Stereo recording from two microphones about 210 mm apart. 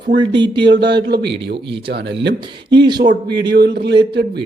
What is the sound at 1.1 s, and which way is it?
Speech, 50° right (ahead or behind).